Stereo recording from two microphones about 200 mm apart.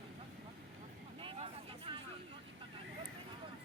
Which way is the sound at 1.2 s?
25° right (ahead or behind).